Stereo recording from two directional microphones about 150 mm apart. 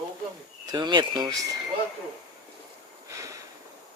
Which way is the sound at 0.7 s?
30° right (ahead or behind).